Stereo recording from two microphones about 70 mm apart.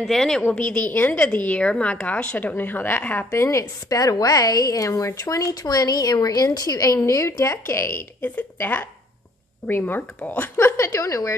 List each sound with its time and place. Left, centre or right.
0.0 s speech: centre
0.5 s a woman's voice: centre
3.3 s a woman's voice: left
7.0 s a woman's voice: left
8.5 s a woman's voice: left
10.9 s a woman's voice: left